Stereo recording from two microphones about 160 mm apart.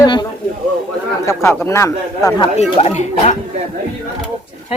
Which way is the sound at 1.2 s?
15° left (ahead or behind).